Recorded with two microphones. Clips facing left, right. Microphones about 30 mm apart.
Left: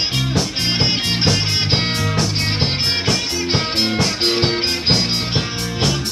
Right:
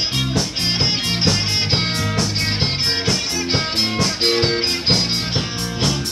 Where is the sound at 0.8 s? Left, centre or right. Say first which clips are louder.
Left 2 dB; centre.